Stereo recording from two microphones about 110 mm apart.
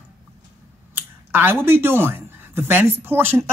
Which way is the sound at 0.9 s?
20° right (ahead or behind).